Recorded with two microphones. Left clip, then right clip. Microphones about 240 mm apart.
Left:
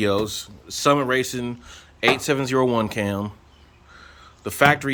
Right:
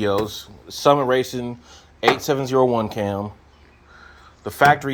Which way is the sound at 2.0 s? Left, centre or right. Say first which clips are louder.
Right 1 dB; centre.